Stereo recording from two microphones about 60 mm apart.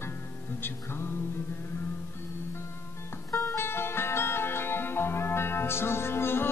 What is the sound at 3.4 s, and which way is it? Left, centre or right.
Music, left.